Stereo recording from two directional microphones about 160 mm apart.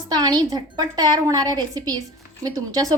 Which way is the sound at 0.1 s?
25° right (ahead or behind).